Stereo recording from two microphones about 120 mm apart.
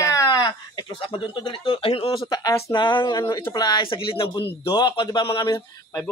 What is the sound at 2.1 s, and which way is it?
Speech, 35° left (ahead or behind).